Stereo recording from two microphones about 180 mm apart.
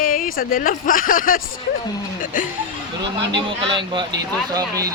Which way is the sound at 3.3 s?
25° right (ahead or behind).